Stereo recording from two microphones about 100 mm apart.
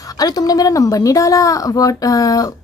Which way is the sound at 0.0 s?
40° left (ahead or behind).